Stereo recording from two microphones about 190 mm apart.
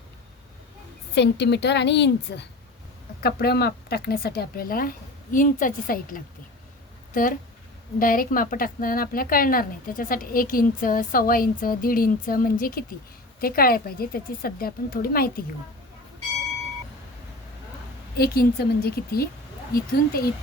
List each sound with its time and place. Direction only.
1.1 s a woman's voice: 65° left (ahead or behind)
18.2 s a woman's voice: 55° left (ahead or behind)